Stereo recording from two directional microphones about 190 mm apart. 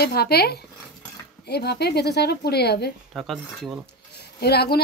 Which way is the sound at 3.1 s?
Centre (ahead or behind).